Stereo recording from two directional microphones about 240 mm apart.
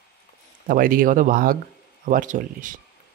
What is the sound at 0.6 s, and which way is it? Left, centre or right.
Speech, right.